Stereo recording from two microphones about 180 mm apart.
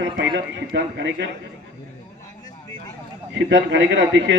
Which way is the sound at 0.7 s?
70° right (ahead or behind).